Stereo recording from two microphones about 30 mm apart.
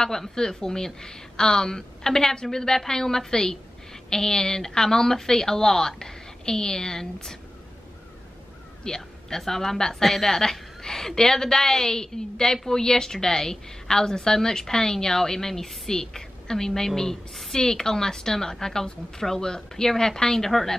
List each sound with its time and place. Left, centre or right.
0.0 s a woman's voice: centre
8.8 s a sound: left
9.4 s a woman's voice: centre